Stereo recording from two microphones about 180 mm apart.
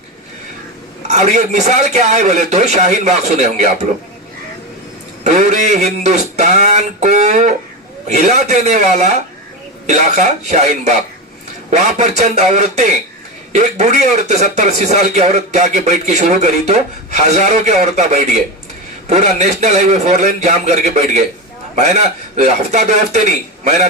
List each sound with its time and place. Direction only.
1.0 s a man's voice: 40° right (ahead or behind)
5.2 s a sound: 40° right (ahead or behind)
8.0 s a man's voice: 40° right (ahead or behind)